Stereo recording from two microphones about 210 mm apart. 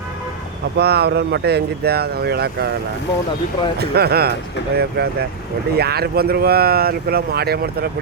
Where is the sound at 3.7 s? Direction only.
50° right (ahead or behind).